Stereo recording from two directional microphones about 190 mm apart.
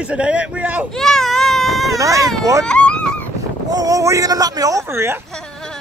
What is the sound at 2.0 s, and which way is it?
Speech, 15° right (ahead or behind).